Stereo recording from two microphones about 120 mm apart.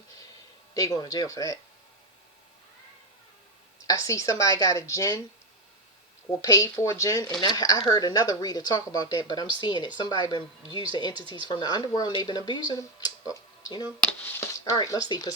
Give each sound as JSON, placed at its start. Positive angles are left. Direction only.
{"t": 0.7, "sound": "speech", "side_deg": 30}
{"t": 3.8, "sound": "a woman's voice", "side_deg": 30}
{"t": 6.3, "sound": "a woman's voice", "side_deg": 25}
{"t": 14.0, "sound": "speech", "side_deg": 15}
{"t": 14.7, "sound": "a woman's voice", "side_deg": 30}